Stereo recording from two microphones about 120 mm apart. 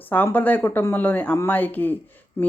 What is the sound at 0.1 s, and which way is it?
Speech, 15° left (ahead or behind).